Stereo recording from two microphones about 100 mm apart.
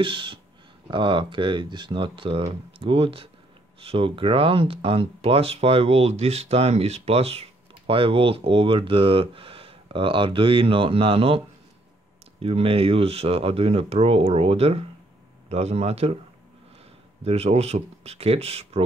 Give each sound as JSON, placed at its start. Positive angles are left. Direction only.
{"t": 0.0, "sound": "speech", "side_deg": -60}
{"t": 17.2, "sound": "speech", "side_deg": -90}